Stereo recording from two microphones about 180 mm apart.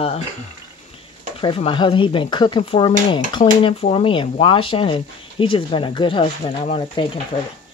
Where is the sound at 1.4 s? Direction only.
30° left (ahead or behind).